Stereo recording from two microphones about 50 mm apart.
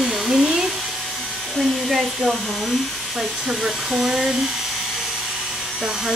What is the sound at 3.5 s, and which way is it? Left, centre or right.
Speech, centre.